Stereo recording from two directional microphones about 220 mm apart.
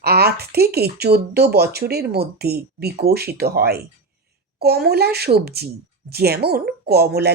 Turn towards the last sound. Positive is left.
turn(degrees=-45)  # may be behind; listen again after turning